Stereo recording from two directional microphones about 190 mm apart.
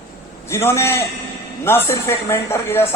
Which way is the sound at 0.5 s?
15° left (ahead or behind).